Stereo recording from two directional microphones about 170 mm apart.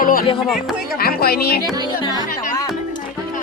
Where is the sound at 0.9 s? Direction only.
65° left (ahead or behind).